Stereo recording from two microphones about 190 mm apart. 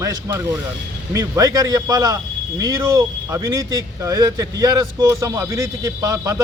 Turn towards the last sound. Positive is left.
turn(degrees=-15)  # may be behind; listen again after turning